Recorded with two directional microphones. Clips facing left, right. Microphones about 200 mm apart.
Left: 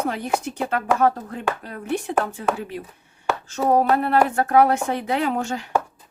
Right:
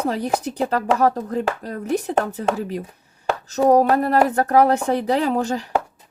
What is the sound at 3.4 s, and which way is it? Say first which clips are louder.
A woman's voice: right 4 dB; 40° right (ahead or behind).